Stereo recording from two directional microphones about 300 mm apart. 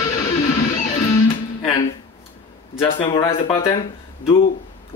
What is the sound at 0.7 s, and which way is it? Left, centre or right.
Music, left.